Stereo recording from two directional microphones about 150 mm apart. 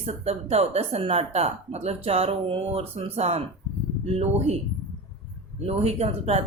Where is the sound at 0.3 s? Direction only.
45° right (ahead or behind).